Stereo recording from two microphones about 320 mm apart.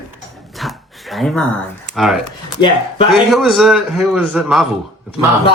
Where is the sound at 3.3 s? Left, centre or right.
Centre.